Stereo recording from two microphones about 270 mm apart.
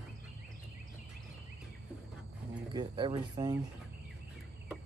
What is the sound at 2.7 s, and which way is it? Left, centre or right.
Speech, centre.